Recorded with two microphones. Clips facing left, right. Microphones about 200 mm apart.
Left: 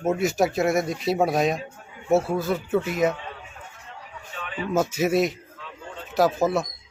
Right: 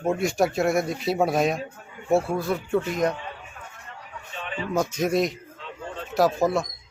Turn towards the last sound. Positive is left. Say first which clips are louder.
# even
turn(degrees=0)  # may be behind; listen again after turning